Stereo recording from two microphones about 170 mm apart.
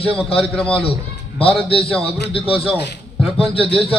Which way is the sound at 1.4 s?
35° left (ahead or behind).